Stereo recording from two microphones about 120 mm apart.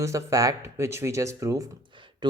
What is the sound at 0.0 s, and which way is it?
Speech, 25° right (ahead or behind).